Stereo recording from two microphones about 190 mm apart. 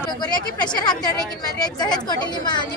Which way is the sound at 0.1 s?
20° left (ahead or behind).